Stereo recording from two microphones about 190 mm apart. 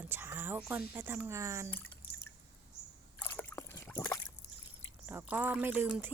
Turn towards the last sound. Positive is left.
turn(degrees=-10)  # may be behind; listen again after turning